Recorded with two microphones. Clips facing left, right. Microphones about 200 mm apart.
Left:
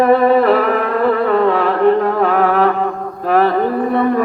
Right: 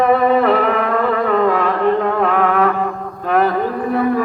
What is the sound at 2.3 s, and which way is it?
Music, 35° left (ahead or behind).